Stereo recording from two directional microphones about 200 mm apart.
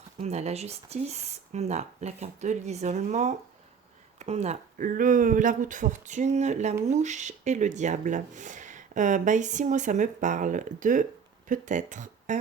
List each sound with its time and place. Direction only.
0.2 s speech: 35° right (ahead or behind)